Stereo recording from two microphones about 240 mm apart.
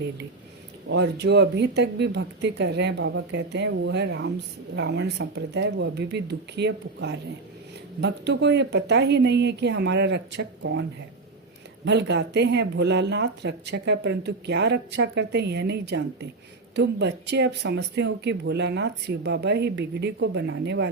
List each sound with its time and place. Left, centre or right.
0.9 s speech: right
11.9 s speech: right